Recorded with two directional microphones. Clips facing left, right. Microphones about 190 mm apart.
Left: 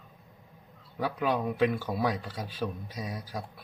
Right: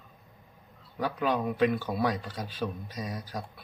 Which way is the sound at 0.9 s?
5° left (ahead or behind).